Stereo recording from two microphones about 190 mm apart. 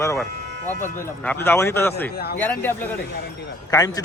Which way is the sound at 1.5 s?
10° left (ahead or behind).